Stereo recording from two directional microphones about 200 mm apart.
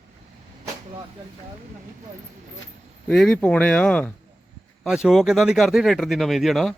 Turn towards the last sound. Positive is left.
turn(degrees=0)  # may be behind; listen again after turning